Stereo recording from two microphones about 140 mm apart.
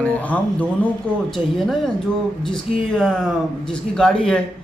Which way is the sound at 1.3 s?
Centre (ahead or behind).